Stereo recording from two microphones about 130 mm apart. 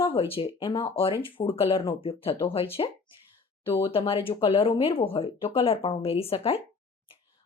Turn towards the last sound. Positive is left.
turn(degrees=50)  # may be behind; listen again after turning